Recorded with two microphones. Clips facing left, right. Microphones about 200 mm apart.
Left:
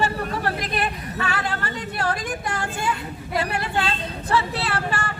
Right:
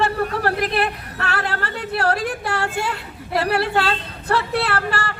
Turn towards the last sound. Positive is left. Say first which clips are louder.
# right 4 dB
turn(degrees=-60)  # may be behind; listen again after turning